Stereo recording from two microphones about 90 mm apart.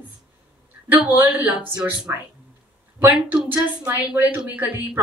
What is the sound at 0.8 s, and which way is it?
Speech, 20° right (ahead or behind).